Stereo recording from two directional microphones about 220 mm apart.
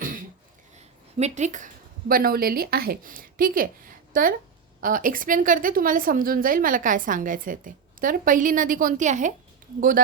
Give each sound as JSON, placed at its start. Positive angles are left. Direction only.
{"t": 0.8, "sound": "a woman's voice", "side_deg": -30}